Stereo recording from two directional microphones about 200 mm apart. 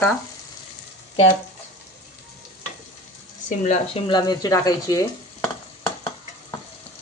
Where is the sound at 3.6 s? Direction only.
25° left (ahead or behind).